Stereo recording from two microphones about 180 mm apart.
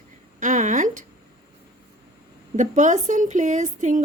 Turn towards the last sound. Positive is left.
turn(degrees=-45)  # may be behind; listen again after turning